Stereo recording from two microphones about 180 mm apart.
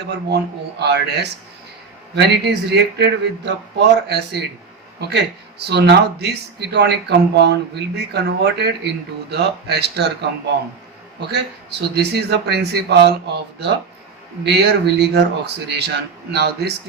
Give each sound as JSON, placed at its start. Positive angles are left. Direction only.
{"t": 0.8, "sound": "speech", "side_deg": -70}
{"t": 11.2, "sound": "speech", "side_deg": -70}